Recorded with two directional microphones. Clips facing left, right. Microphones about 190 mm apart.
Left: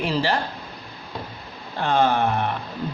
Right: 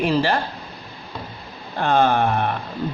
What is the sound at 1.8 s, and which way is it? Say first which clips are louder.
Speech: right 2 dB; 55° right (ahead or behind).